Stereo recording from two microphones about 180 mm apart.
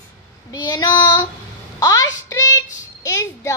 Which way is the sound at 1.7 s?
20° left (ahead or behind).